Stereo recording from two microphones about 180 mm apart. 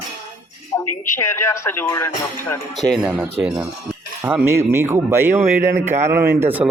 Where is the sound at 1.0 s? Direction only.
15° left (ahead or behind).